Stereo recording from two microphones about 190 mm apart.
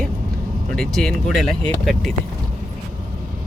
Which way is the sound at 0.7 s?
Centre (ahead or behind).